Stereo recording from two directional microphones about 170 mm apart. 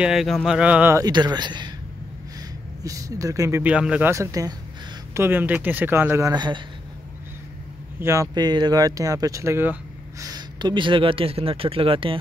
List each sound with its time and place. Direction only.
0.0 s speech: centre (ahead or behind)
1.0 s speech: 25° right (ahead or behind)
2.8 s a man's voice: 20° right (ahead or behind)
8.0 s speech: 20° right (ahead or behind)
10.2 s speech: 25° right (ahead or behind)